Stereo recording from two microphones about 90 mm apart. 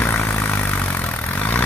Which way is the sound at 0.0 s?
20° left (ahead or behind).